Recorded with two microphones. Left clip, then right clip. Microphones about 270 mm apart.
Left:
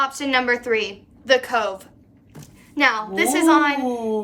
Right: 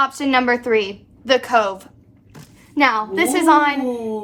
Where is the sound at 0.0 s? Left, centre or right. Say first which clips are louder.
Right 3 dB; centre.